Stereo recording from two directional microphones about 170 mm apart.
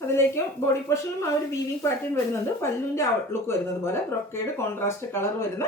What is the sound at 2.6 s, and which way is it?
Speech, 15° left (ahead or behind).